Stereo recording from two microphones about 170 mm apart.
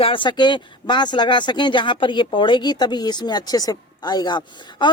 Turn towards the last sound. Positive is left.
turn(degrees=25)  # may be behind; listen again after turning